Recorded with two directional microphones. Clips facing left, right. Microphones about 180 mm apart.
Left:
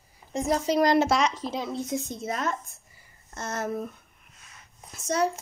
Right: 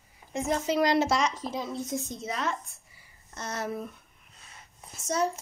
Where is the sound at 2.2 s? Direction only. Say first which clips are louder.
Left 2 dB; 45° left (ahead or behind).